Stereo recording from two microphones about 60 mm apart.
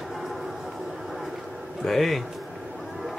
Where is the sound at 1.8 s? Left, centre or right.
Centre.